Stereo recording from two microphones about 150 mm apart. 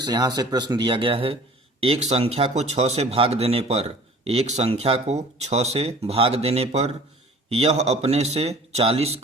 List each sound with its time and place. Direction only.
0.0 s a man's voice: 25° right (ahead or behind); by 9.2 s 40° right (ahead or behind)